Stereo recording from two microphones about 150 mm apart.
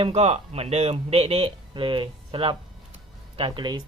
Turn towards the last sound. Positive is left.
turn(degrees=-30)  # may be behind; listen again after turning